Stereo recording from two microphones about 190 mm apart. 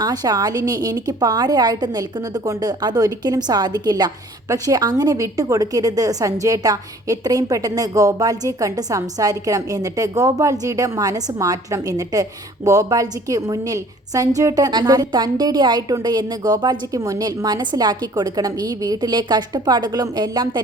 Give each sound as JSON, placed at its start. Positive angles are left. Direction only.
{"t": 0.0, "sound": "a woman's voice", "side_deg": -20}